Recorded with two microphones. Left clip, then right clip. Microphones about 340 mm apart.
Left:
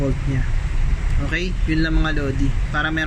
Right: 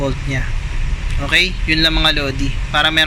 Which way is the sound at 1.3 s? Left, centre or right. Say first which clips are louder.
Right 10 dB; centre.